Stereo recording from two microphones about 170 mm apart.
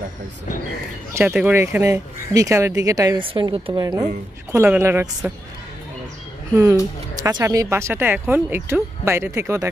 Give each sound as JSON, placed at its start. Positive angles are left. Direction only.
{"t": 1.3, "sound": "speech", "side_deg": -10}
{"t": 4.5, "sound": "speech", "side_deg": -15}
{"t": 6.5, "sound": "speech", "side_deg": -15}